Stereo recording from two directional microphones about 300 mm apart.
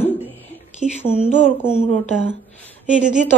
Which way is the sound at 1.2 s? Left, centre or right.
Centre.